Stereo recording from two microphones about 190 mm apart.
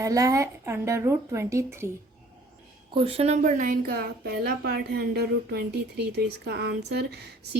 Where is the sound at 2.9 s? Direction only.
30° right (ahead or behind); by 7.3 s 60° right (ahead or behind).